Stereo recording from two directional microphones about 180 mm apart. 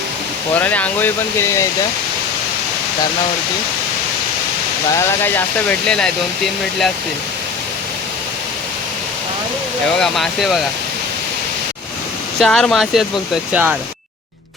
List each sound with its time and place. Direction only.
0.6 s speech: 10° left (ahead or behind)
4.9 s speech: 10° left (ahead or behind)
10.0 s speech: centre (ahead or behind)
12.4 s speech: 5° left (ahead or behind)